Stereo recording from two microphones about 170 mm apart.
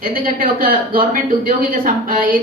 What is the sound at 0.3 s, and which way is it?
A man's voice, 55° right (ahead or behind).